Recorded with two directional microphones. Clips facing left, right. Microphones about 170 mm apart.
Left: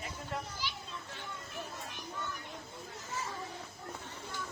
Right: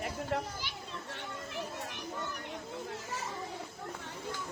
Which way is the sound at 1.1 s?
80° right.